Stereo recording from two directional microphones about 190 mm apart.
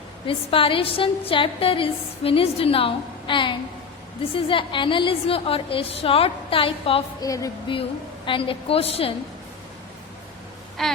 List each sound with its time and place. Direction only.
0.3 s a woman's voice: 30° left (ahead or behind)
7.3 s a woman's voice: 20° left (ahead or behind)
10.8 s speech: centre (ahead or behind)